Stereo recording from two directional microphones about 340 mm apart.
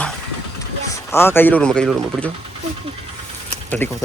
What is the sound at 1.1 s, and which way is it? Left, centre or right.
Speech, centre.